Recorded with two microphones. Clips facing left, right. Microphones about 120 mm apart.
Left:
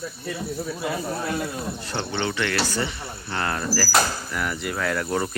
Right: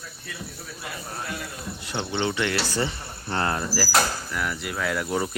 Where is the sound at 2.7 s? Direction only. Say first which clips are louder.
Even; 35° right (ahead or behind).